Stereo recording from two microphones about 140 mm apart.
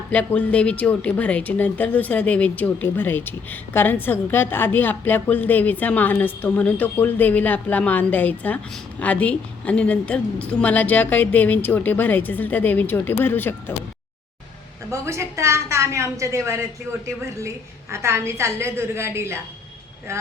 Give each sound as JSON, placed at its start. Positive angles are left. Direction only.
{"t": 0.1, "sound": "speech", "side_deg": 10}
{"t": 14.8, "sound": "a woman's voice", "side_deg": -20}
{"t": 17.9, "sound": "a woman's voice", "side_deg": -20}